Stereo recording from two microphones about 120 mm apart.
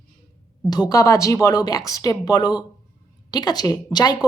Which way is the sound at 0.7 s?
30° left (ahead or behind).